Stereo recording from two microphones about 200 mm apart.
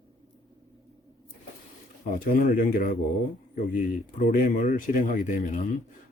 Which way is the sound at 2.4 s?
45° left (ahead or behind).